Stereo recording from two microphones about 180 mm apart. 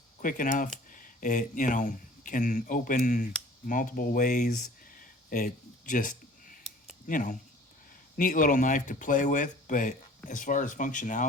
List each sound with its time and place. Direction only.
0.2 s speech: 50° left (ahead or behind)